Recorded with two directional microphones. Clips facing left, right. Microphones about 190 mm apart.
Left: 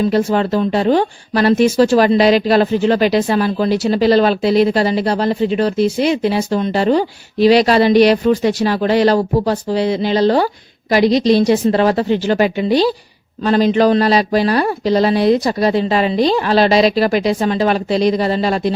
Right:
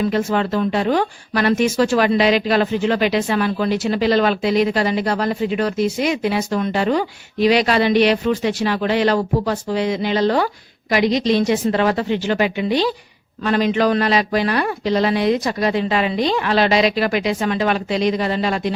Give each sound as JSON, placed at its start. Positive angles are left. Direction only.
{"t": 0.0, "sound": "speech", "side_deg": 35}